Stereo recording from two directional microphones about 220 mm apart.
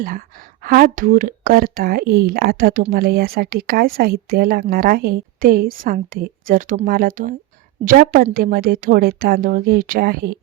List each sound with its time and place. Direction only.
0.6 s a woman's voice: 40° right (ahead or behind)